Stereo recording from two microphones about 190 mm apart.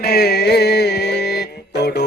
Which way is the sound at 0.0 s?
55° left (ahead or behind).